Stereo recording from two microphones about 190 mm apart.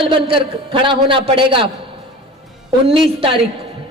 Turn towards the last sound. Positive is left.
turn(degrees=-30)  # may be behind; listen again after turning